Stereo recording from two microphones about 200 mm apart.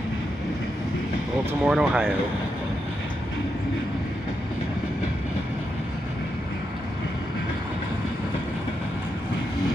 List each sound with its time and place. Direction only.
1.6 s speech: 5° right (ahead or behind)